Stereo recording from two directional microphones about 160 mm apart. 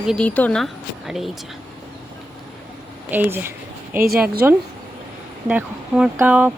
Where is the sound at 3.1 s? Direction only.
10° right (ahead or behind).